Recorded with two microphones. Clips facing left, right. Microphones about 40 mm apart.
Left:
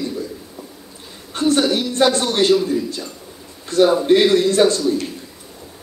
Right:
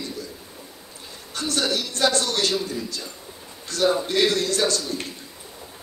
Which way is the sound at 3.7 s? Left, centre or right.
Left.